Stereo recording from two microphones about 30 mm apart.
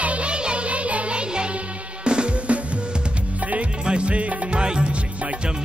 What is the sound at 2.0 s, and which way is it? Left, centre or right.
Music, right.